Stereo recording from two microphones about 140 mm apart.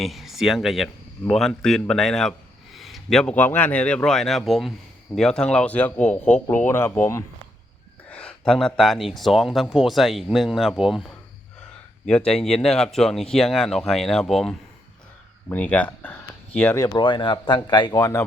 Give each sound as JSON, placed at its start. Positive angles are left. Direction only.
{"t": 0.0, "sound": "speech", "side_deg": 0}
{"t": 8.1, "sound": "speech", "side_deg": 5}
{"t": 16.8, "sound": "speech", "side_deg": 30}